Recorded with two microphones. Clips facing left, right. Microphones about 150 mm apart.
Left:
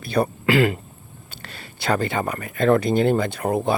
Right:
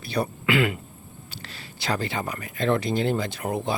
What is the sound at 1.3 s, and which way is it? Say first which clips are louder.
Speech: left 3 dB; 55° left (ahead or behind).